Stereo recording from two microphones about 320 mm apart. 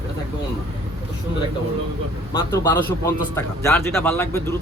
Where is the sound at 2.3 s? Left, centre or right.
Centre.